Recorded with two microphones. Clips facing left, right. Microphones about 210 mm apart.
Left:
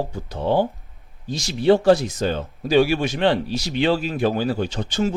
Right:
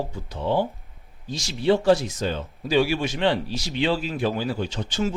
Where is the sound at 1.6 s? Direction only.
50° left (ahead or behind).